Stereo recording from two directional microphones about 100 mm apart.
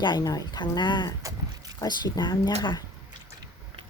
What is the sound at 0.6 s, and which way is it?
Speech, 50° left (ahead or behind).